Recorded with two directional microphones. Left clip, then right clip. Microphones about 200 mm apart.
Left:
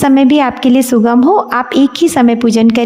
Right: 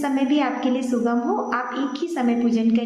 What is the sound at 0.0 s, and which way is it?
A woman's voice, 50° left (ahead or behind).